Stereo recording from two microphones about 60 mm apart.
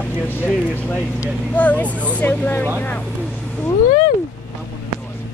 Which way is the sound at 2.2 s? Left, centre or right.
Left.